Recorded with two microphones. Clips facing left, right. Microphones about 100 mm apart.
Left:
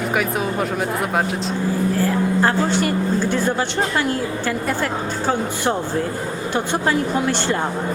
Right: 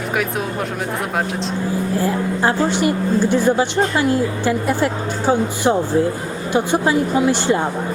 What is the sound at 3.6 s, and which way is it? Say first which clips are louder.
Speech: right 3 dB; 10° right (ahead or behind).